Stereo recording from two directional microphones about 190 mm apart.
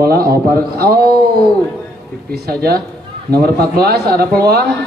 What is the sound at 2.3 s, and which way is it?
A man's voice, 55° right (ahead or behind).